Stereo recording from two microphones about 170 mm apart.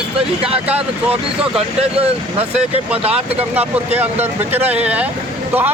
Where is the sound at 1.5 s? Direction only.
35° right (ahead or behind).